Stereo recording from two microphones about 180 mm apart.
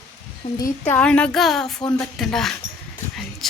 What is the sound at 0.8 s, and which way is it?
A woman's voice, 10° left (ahead or behind).